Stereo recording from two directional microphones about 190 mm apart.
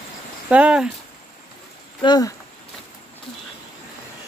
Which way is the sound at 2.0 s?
20° left (ahead or behind).